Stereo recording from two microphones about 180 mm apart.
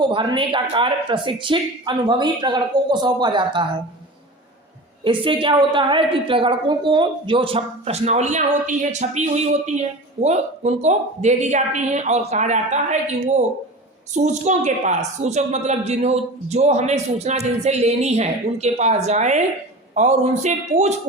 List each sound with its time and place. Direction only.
0.0 s speech: 25° right (ahead or behind)
5.0 s a woman's voice: 30° right (ahead or behind)